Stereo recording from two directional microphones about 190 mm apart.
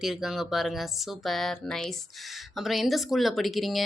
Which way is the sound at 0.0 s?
Centre (ahead or behind).